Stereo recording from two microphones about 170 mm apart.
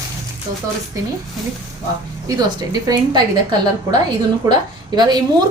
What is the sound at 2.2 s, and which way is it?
Speech, 20° right (ahead or behind).